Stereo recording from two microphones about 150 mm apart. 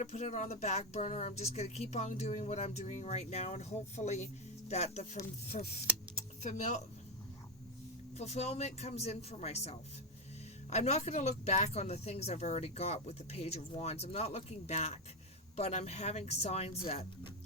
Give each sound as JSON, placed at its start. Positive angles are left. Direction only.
{"t": 0.0, "sound": "speech", "side_deg": 50}
{"t": 8.2, "sound": "speech", "side_deg": 45}